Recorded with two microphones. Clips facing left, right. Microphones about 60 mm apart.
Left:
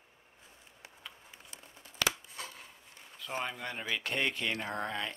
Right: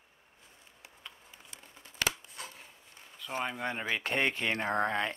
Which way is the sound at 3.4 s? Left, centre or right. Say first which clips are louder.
Right 3 dB; centre.